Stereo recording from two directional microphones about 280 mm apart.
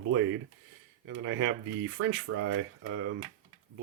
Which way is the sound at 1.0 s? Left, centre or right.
Right.